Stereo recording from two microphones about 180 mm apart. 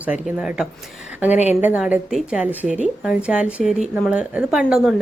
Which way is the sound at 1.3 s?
40° left (ahead or behind).